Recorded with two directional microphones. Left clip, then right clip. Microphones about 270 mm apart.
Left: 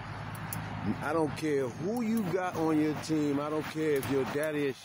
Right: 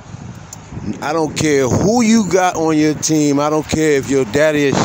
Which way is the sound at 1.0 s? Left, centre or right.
Right.